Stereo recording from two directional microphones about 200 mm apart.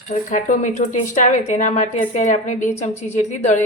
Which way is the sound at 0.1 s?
40° left (ahead or behind).